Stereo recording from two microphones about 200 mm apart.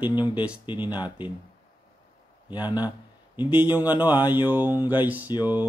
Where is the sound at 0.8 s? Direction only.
20° left (ahead or behind).